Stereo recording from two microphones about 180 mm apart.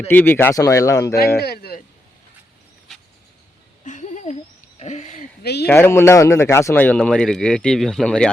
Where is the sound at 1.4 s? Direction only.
60° left (ahead or behind).